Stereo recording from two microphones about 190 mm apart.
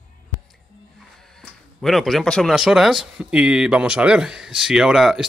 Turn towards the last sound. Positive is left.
turn(degrees=0)  # may be behind; listen again after turning